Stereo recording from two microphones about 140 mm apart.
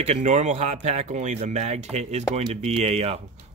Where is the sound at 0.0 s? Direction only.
55° right (ahead or behind).